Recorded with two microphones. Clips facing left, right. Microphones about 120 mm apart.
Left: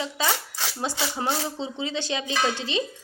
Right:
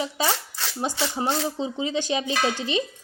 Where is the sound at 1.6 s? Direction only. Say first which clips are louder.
Right 3 dB; 15° right (ahead or behind).